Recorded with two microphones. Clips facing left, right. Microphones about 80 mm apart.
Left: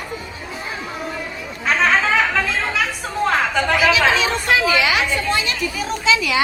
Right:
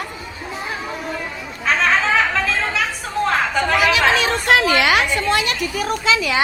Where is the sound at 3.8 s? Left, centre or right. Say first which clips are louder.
Even; right.